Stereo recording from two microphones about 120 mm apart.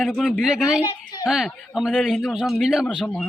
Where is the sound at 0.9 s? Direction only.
35° left (ahead or behind).